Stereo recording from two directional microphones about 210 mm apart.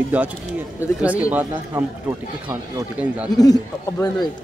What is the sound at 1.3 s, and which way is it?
Speech, 10° right (ahead or behind).